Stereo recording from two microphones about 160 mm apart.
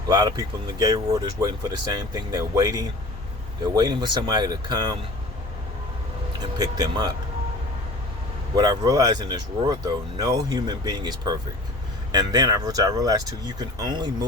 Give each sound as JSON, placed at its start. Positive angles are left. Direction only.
{"t": 0.1, "sound": "speech", "side_deg": -25}
{"t": 6.4, "sound": "speech", "side_deg": -25}
{"t": 8.5, "sound": "speech", "side_deg": -25}